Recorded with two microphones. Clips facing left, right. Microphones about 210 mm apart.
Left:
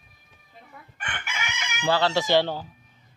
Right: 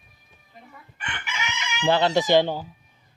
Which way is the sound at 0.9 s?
50° left (ahead or behind).